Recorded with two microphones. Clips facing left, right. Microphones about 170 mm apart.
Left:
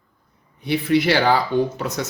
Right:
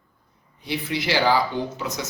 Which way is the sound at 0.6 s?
55° left (ahead or behind).